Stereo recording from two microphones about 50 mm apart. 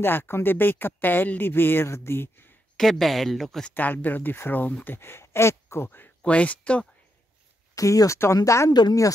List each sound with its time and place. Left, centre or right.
0.0 s speech: left
1.9 s speech: left
2.8 s speech: centre
3.7 s speech: left
4.9 s speech: left
5.9 s speech: left
6.2 s speech: left
7.8 s speech: left
8.2 s speech: left